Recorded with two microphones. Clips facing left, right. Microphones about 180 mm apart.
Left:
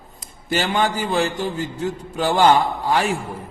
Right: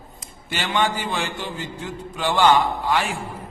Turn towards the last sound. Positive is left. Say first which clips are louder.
# left 3 dB
turn(degrees=40)  # may be behind; listen again after turning